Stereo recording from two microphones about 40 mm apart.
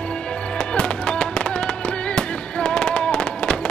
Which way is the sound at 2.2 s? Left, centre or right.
Left.